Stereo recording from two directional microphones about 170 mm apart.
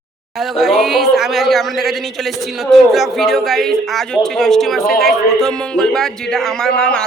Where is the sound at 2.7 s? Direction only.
Centre (ahead or behind).